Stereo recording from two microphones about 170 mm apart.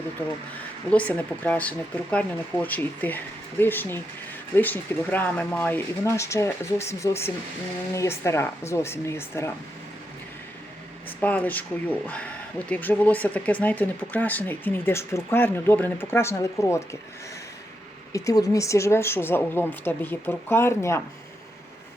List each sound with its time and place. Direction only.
0.9 s speech: 10° left (ahead or behind)
11.2 s speech: 10° left (ahead or behind)
18.1 s speech: 20° left (ahead or behind)